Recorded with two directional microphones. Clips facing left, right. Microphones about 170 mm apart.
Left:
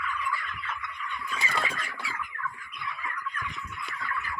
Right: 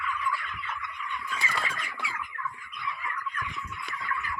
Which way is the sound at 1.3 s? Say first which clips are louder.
Left 2 dB; 20° left (ahead or behind).